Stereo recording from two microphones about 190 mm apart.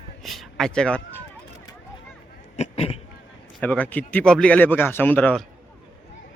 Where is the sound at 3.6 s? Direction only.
10° left (ahead or behind).